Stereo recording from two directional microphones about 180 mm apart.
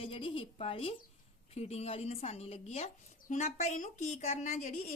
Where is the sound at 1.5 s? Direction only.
35° left (ahead or behind).